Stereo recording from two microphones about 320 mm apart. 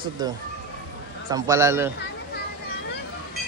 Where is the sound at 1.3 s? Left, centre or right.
Centre.